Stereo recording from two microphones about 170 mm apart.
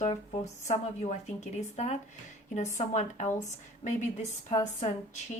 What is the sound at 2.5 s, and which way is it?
Speech, 45° left (ahead or behind).